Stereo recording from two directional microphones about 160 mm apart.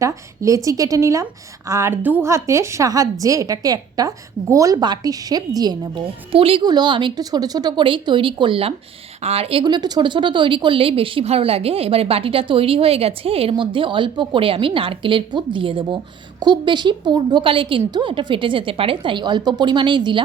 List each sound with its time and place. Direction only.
0.0 s a woman's voice: 20° right (ahead or behind)